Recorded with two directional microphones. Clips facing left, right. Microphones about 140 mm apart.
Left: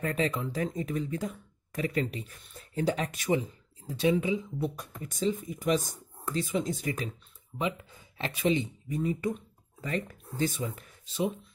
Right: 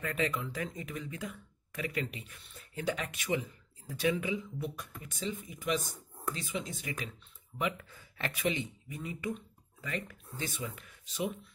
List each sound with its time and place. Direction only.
0.0 s speech: 35° left (ahead or behind)
7.5 s speech: 25° left (ahead or behind)